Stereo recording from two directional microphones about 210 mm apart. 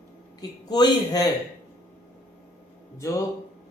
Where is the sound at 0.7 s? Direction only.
20° left (ahead or behind).